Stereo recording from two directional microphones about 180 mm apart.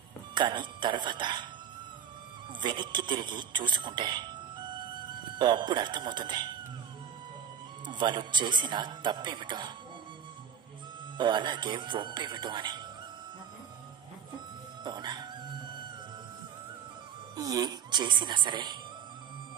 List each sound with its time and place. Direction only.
0.3 s speech: 25° right (ahead or behind)
2.6 s speech: 25° right (ahead or behind)
7.8 s speech: 25° right (ahead or behind)
11.1 s speech: 25° right (ahead or behind)
14.8 s music: 25° right (ahead or behind)
17.4 s speech: 20° right (ahead or behind)